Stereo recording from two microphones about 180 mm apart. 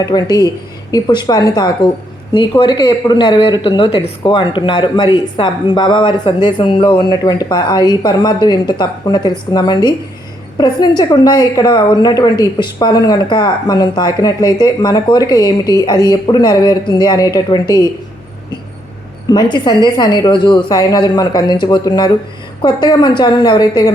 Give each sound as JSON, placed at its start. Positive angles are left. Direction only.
{"t": 0.0, "sound": "speech", "side_deg": 20}
{"t": 19.3, "sound": "speech", "side_deg": 25}